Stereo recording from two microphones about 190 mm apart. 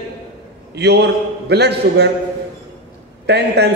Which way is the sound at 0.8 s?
60° right (ahead or behind).